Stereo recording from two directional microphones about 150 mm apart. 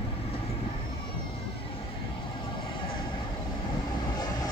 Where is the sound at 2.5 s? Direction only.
35° left (ahead or behind).